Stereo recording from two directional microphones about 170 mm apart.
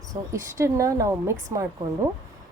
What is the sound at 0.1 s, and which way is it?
Speech, 20° right (ahead or behind).